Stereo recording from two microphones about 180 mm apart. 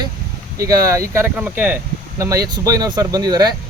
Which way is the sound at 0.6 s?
20° right (ahead or behind).